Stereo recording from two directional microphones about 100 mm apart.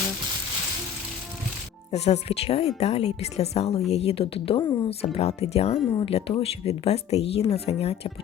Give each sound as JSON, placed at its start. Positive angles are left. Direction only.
{"t": 1.9, "sound": "a woman's voice", "side_deg": 90}
{"t": 4.9, "sound": "speech", "side_deg": 85}
{"t": 6.0, "sound": "speech", "side_deg": 75}